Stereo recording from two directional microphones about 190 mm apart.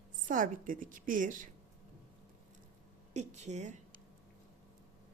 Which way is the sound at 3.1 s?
35° right (ahead or behind).